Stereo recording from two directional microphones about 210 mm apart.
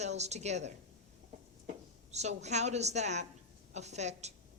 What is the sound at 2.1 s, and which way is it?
A woman's voice, 30° right (ahead or behind).